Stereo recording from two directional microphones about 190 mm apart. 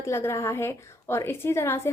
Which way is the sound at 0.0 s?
15° left (ahead or behind).